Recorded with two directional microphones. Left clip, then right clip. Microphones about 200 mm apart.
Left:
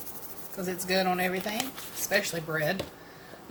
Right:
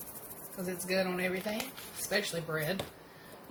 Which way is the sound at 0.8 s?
35° left (ahead or behind).